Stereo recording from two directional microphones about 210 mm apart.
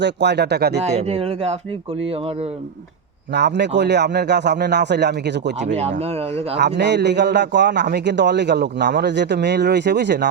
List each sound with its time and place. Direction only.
0.0 s speech: 55° right (ahead or behind)
0.8 s speech: 30° right (ahead or behind)
3.3 s a man's voice: 55° right (ahead or behind)
6.0 s speech: 30° right (ahead or behind)
6.6 s a man's voice: 55° right (ahead or behind)